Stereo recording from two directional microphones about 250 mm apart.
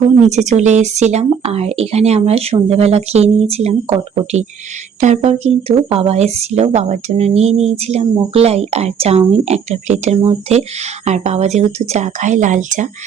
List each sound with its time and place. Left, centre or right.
0.2 s speech: right